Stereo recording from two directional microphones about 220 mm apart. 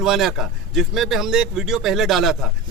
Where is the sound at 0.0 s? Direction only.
Centre (ahead or behind).